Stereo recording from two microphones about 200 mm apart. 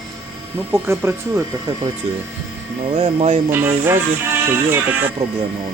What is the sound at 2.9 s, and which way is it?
Speech, 30° right (ahead or behind).